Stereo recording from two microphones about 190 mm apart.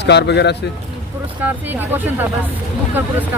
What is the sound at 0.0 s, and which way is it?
Speech, 65° left (ahead or behind).